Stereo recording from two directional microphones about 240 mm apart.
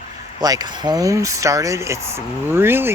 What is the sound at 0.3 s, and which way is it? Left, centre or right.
Speech, centre.